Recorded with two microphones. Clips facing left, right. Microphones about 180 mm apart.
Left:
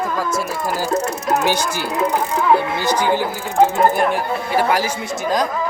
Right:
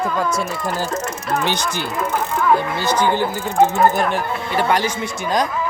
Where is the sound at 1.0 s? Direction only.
40° left (ahead or behind).